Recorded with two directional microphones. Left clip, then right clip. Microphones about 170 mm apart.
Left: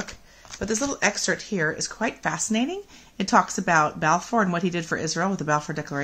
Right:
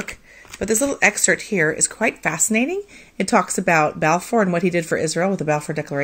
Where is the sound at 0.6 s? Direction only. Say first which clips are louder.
Right 7 dB; 25° right (ahead or behind).